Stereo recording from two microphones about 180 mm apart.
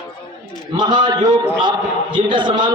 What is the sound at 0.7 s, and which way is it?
A man's voice, 25° right (ahead or behind).